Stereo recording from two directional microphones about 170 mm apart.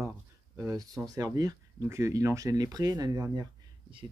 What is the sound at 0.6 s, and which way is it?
Speech, 20° right (ahead or behind).